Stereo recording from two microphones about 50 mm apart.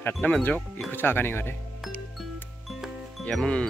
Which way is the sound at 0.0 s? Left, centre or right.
Left.